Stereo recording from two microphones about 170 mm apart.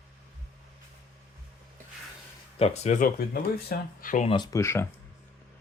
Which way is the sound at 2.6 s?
40° left (ahead or behind).